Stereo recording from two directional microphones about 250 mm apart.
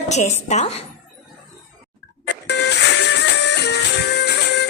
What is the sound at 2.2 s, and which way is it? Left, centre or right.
Music, left.